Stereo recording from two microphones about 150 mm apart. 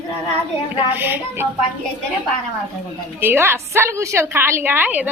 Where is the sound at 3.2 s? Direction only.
15° right (ahead or behind).